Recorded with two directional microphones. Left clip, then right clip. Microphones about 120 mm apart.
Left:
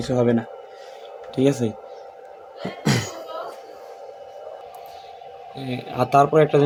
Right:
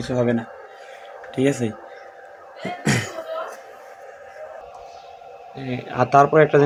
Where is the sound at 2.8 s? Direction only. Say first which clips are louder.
Right 1 dB; 40° left (ahead or behind).